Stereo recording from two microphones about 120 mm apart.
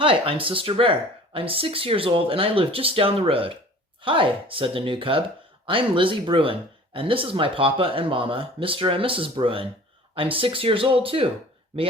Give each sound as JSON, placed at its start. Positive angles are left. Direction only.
{"t": 0.0, "sound": "speech", "side_deg": -50}